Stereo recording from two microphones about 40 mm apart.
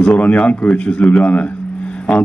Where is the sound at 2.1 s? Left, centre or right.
Centre.